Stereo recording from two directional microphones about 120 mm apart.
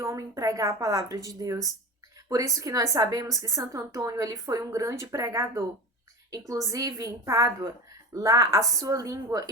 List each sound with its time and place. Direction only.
0.0 s a woman's voice: 25° right (ahead or behind)